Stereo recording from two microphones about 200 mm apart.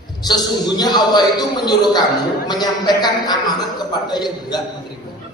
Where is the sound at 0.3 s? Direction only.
20° left (ahead or behind).